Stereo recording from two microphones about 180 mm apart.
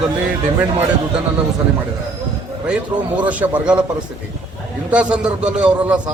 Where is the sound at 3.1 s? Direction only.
10° right (ahead or behind).